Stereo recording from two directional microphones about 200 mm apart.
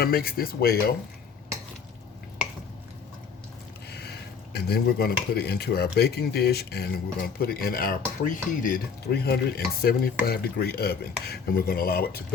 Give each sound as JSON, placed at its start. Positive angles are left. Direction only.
{"t": 0.0, "sound": "speech", "side_deg": 50}
{"t": 4.5, "sound": "speech", "side_deg": 50}